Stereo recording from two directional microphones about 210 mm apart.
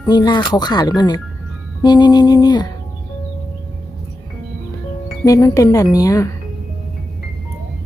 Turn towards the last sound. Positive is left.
turn(degrees=15)  # may be behind; listen again after turning